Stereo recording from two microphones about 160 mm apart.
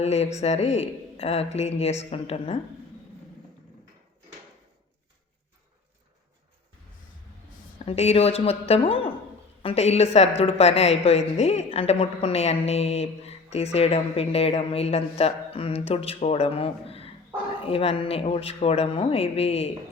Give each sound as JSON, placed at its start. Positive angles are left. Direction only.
{"t": 0.0, "sound": "a woman's voice", "side_deg": 40}
{"t": 7.9, "sound": "a woman's voice", "side_deg": 40}